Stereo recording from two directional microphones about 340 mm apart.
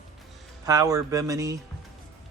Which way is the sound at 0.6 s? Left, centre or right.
Centre.